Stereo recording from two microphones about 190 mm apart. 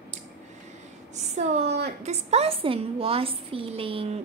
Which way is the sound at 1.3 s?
35° right (ahead or behind).